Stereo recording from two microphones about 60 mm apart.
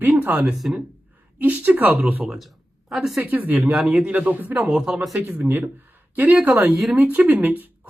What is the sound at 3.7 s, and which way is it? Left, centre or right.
Speech, centre.